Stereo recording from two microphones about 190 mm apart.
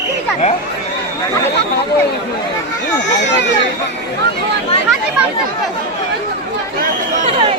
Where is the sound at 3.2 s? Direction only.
70° left (ahead or behind).